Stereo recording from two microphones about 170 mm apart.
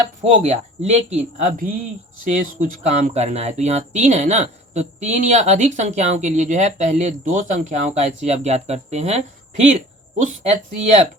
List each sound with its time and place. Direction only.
0.2 s speech: 40° right (ahead or behind)